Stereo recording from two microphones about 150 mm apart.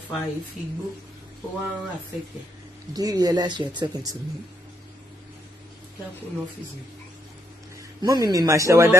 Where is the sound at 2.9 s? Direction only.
25° right (ahead or behind).